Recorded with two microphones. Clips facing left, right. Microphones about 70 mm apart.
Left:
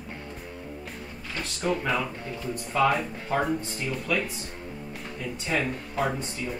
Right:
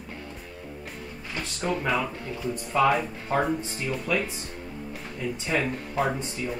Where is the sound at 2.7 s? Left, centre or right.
Centre.